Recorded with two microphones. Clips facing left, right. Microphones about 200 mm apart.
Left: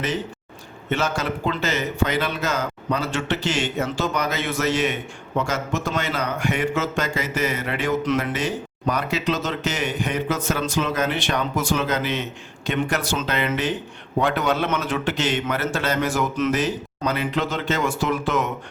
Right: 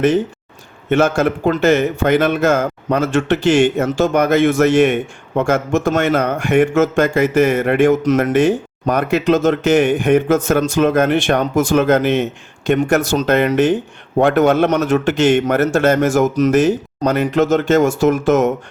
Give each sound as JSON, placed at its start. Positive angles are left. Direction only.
{"t": 0.9, "sound": "speech", "side_deg": -50}